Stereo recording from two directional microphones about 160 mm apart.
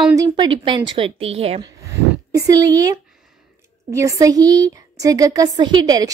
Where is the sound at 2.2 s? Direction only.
20° right (ahead or behind).